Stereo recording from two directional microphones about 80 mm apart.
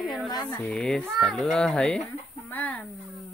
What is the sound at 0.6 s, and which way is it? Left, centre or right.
Speech, centre.